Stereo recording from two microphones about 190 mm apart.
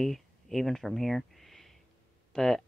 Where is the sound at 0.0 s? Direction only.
Centre (ahead or behind).